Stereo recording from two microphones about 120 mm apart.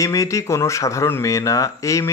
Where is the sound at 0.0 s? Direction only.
25° left (ahead or behind).